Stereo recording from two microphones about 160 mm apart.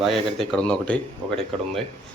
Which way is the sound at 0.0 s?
Centre (ahead or behind).